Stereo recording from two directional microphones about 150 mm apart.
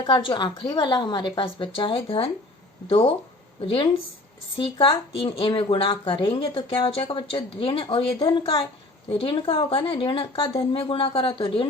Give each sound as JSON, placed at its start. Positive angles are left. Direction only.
{"t": 0.0, "sound": "speech", "side_deg": 35}
{"t": 4.5, "sound": "speech", "side_deg": 35}